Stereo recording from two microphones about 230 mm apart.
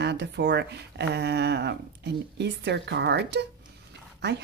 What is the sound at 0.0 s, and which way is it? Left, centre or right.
A woman's voice, right.